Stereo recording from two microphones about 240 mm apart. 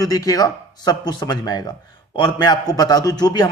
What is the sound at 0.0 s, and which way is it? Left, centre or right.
A man's voice, centre.